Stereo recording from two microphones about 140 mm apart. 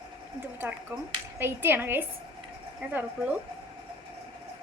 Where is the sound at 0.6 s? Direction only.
10° right (ahead or behind).